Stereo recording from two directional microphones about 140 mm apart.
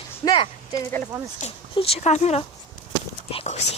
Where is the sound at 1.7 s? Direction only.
45° left (ahead or behind).